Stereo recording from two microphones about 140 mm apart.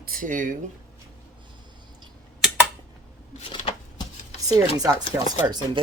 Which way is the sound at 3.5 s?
35° left (ahead or behind).